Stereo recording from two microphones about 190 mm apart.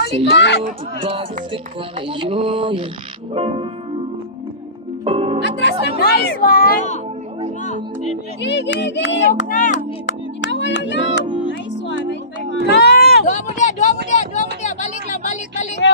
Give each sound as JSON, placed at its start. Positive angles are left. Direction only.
{"t": 0.0, "sound": "a woman's voice", "side_deg": 65}
{"t": 0.7, "sound": "music", "side_deg": -30}
{"t": 3.3, "sound": "speech", "side_deg": -30}
{"t": 5.0, "sound": "music", "side_deg": -30}
{"t": 5.6, "sound": "speech", "side_deg": 60}
{"t": 7.6, "sound": "speech", "side_deg": 35}
{"t": 8.4, "sound": "speech", "side_deg": 70}
{"t": 9.5, "sound": "speech", "side_deg": 45}
{"t": 10.0, "sound": "music", "side_deg": 70}
{"t": 12.8, "sound": "a sound", "side_deg": 55}
{"t": 13.2, "sound": "speech", "side_deg": 40}
{"t": 14.0, "sound": "a sound", "side_deg": 40}